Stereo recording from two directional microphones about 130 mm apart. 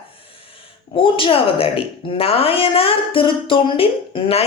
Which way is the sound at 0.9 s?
40° left (ahead or behind).